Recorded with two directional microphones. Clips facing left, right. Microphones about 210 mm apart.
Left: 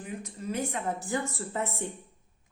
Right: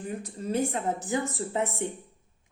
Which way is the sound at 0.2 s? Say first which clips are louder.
Right 5 dB; 35° right (ahead or behind).